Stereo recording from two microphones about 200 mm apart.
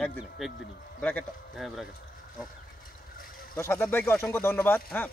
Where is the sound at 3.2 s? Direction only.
45° left (ahead or behind).